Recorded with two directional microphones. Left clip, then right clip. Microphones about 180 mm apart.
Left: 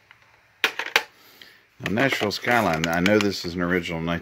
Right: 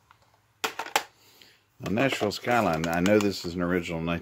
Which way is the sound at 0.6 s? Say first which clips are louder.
Left 6 dB; 50° right (ahead or behind).